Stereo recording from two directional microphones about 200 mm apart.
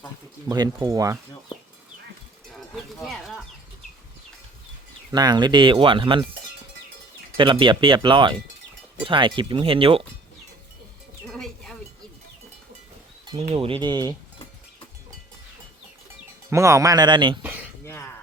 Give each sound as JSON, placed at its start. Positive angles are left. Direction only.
{"t": 0.4, "sound": "speech", "side_deg": -20}
{"t": 3.0, "sound": "chicken", "side_deg": 0}
{"t": 5.1, "sound": "speech", "side_deg": -20}
{"t": 7.3, "sound": "speech", "side_deg": -25}
{"t": 11.3, "sound": "a sound", "side_deg": 0}
{"t": 13.4, "sound": "speech", "side_deg": -30}
{"t": 16.5, "sound": "speech", "side_deg": -15}
{"t": 17.8, "sound": "a sound", "side_deg": 15}